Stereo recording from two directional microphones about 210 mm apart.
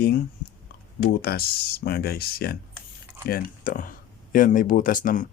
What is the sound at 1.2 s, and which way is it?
Speech, 50° left (ahead or behind).